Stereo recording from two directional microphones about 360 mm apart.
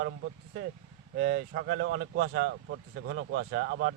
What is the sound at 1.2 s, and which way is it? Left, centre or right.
Speech, right.